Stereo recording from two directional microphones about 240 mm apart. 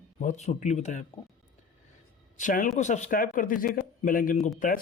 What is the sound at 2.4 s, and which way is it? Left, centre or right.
A man's voice, left.